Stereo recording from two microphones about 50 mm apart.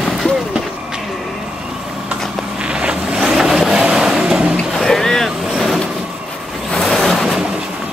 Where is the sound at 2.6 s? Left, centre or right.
Right.